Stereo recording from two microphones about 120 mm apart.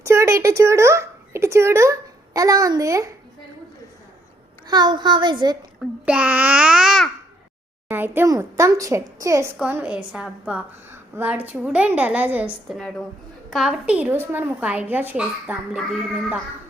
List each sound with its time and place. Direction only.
0.0 s a woman's voice: 25° right (ahead or behind)
4.6 s a child's voice: 35° right (ahead or behind)
5.8 s a woman's voice: 10° right (ahead or behind)
7.9 s a woman's voice: 15° right (ahead or behind)
9.7 s a woman's voice: 10° right (ahead or behind)